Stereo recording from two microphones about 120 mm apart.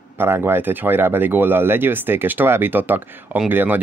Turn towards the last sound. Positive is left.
turn(degrees=-15)  # may be behind; listen again after turning